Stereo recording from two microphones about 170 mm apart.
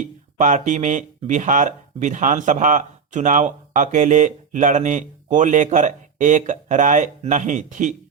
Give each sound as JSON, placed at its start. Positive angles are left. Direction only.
{"t": 0.3, "sound": "speech", "side_deg": -45}